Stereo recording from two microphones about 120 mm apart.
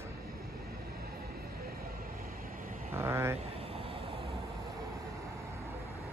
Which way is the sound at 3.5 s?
55° right (ahead or behind).